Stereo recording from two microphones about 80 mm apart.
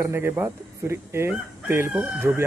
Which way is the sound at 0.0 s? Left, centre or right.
Right.